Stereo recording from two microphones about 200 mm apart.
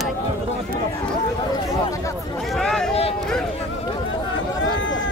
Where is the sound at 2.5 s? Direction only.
Centre (ahead or behind).